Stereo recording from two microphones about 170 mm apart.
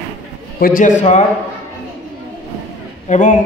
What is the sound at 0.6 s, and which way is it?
Speech, 55° left (ahead or behind).